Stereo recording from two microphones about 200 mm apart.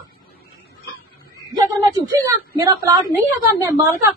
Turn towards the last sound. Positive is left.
turn(degrees=-15)  # may be behind; listen again after turning